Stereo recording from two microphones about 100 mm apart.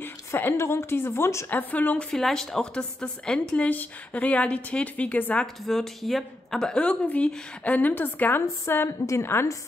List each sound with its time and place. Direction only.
0.0 s a woman's voice: 20° left (ahead or behind)
1.6 s a woman's voice: 15° left (ahead or behind)